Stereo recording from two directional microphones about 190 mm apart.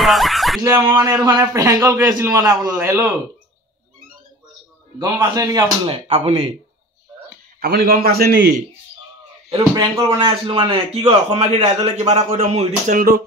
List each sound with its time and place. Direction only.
0.0 s a sound: centre (ahead or behind)
0.6 s a man's voice: 20° right (ahead or behind)
4.9 s a man's voice: 20° right (ahead or behind)
5.9 s speech: 30° right (ahead or behind)
7.6 s a man's voice: 55° right (ahead or behind)
9.5 s speech: 30° right (ahead or behind); by 13.2 s 45° right (ahead or behind)